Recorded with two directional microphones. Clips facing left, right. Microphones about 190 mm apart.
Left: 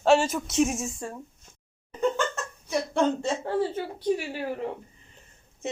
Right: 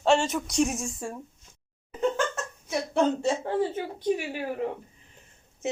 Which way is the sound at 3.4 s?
15° right (ahead or behind).